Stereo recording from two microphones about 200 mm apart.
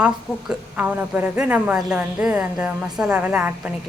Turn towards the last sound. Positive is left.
turn(degrees=-5)  # may be behind; listen again after turning